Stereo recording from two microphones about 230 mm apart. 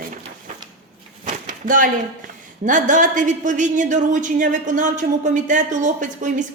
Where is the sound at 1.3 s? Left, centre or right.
Right.